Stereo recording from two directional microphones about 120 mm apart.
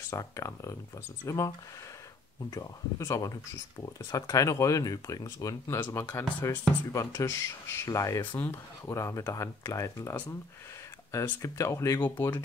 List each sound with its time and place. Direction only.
0.1 s speech: 25° left (ahead or behind)
2.5 s speech: 30° left (ahead or behind)
12.0 s speech: 15° left (ahead or behind)